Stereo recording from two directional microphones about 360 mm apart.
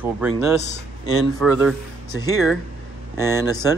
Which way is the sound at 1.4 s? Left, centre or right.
Centre.